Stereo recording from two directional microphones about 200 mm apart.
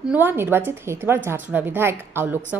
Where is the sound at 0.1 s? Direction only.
10° right (ahead or behind).